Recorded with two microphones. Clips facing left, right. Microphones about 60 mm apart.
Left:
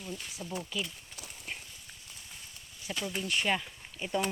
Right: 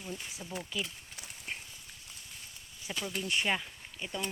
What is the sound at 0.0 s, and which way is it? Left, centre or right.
Speech, centre.